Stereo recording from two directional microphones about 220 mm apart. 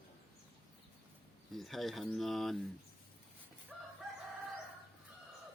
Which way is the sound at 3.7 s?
5° right (ahead or behind).